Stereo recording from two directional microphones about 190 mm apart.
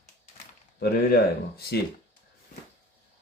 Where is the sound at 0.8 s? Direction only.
55° left (ahead or behind).